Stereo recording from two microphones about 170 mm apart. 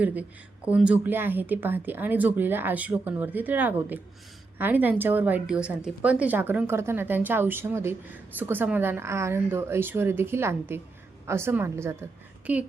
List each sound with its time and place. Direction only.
0.0 s a woman's voice: 10° right (ahead or behind)